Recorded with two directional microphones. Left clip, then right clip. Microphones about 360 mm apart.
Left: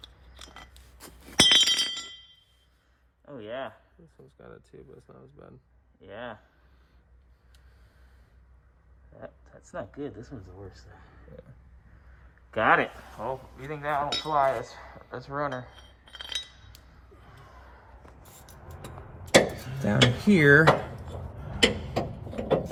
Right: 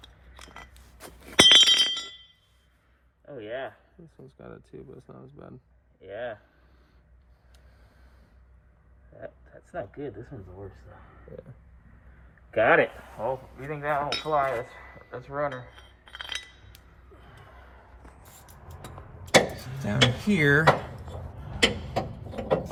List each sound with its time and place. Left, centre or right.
0.4 s chink: centre
3.2 s speech: centre
4.4 s speech: centre
6.0 s speech: centre
9.2 s speech: centre
12.5 s speech: centre
16.0 s chink: centre
18.2 s vehicle: centre
20.2 s speech: left
20.7 s drawer open or close: centre
21.5 s a sound: centre